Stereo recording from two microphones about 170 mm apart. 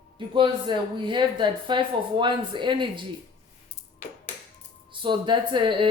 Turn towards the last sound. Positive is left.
turn(degrees=-30)  # may be behind; listen again after turning